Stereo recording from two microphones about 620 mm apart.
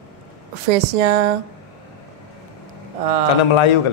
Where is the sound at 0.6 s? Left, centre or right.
Right.